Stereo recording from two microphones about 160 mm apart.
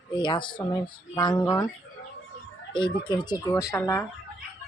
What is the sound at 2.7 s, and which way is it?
Speech, 30° left (ahead or behind).